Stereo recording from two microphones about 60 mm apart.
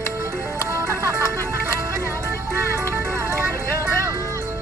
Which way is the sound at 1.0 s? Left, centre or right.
Right.